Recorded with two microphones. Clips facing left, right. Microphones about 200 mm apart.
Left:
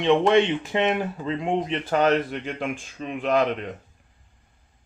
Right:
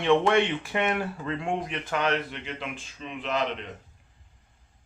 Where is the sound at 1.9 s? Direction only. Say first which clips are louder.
Left 7 dB; 40° left (ahead or behind).